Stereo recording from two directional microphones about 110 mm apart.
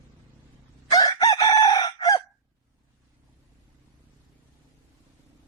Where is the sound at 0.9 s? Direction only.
35° left (ahead or behind).